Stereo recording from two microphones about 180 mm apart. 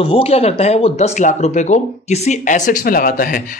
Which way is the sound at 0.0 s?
30° left (ahead or behind).